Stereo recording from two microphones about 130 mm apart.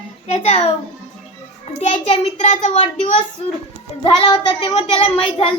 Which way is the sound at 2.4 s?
65° left (ahead or behind).